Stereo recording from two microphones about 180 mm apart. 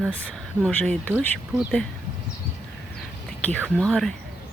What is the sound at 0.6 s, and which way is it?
Speech, 5° left (ahead or behind).